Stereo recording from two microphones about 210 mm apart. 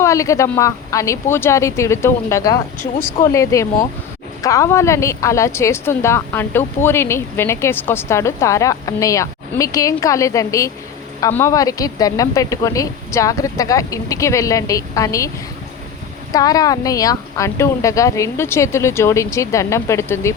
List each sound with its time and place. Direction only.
0.0 s speech: 15° left (ahead or behind)
16.3 s speech: 15° left (ahead or behind)